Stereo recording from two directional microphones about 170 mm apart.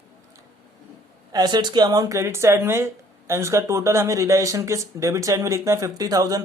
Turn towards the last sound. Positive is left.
turn(degrees=-20)  # may be behind; listen again after turning